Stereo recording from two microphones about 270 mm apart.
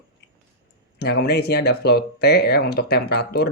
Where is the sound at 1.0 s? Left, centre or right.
Left.